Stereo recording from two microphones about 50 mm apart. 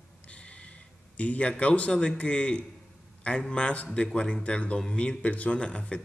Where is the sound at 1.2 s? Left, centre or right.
Left.